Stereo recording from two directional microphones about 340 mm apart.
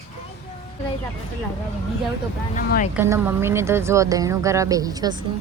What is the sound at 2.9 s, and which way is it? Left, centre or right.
Speech, centre.